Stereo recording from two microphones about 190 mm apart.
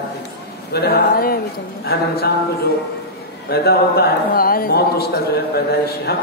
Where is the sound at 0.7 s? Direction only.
55° left (ahead or behind).